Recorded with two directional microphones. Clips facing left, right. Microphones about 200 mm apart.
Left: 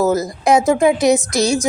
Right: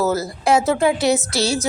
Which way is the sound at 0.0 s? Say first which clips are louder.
Left 4 dB; 15° left (ahead or behind).